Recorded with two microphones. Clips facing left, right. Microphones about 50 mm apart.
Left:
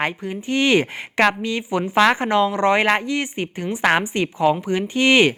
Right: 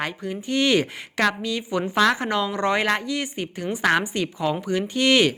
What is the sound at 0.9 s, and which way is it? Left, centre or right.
A woman's voice, left.